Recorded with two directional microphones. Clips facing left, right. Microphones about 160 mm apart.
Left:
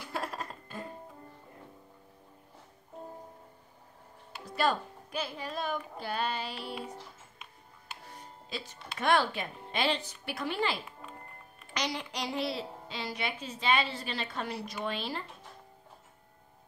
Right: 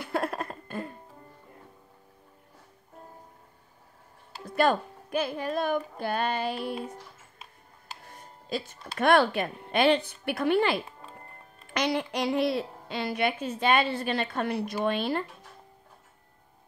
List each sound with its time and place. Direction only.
0.0 s a sound: 60° right (ahead or behind)
4.6 s a woman's voice: 55° right (ahead or behind)
7.9 s speech: 45° right (ahead or behind)
10.9 s music: 30° right (ahead or behind)
11.7 s a woman's voice: 55° right (ahead or behind)